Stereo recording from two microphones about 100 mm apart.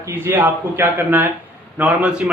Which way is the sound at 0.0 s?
20° right (ahead or behind).